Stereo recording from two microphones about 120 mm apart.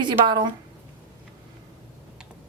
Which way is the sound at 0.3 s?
40° right (ahead or behind).